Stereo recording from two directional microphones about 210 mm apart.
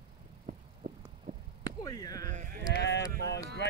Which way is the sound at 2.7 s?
55° left (ahead or behind).